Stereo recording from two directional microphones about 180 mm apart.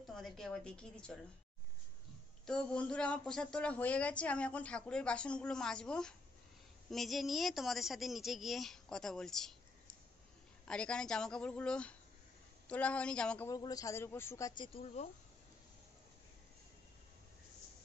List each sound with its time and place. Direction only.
0.0 s speech: centre (ahead or behind)
2.4 s speech: 5° left (ahead or behind)
10.6 s speech: 5° left (ahead or behind)
13.5 s speech: 20° left (ahead or behind)
14.7 s speech: 35° left (ahead or behind)